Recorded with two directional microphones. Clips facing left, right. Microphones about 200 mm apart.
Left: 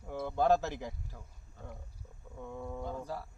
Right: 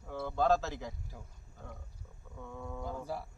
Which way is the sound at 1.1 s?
15° right (ahead or behind).